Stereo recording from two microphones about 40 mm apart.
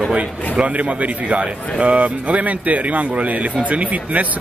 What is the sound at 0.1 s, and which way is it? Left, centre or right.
Speech, right.